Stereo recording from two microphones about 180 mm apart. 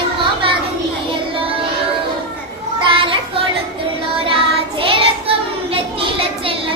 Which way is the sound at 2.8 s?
30° right (ahead or behind).